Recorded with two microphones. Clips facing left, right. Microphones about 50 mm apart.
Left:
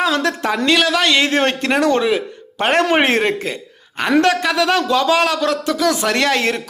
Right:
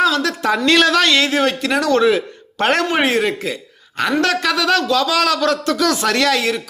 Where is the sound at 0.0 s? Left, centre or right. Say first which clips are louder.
Right 1 dB; left.